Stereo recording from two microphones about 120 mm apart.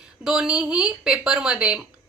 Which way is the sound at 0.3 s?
5° right (ahead or behind).